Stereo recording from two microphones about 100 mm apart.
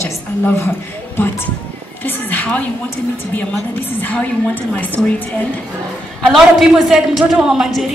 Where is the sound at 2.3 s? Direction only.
15° left (ahead or behind).